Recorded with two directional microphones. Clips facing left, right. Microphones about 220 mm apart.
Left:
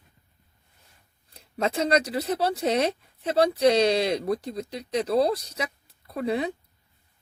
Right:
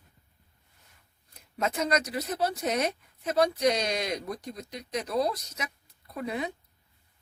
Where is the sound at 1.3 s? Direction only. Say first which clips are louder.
Left 4 dB; 30° left (ahead or behind).